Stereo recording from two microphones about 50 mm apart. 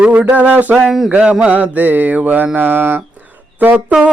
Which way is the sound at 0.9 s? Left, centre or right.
Centre.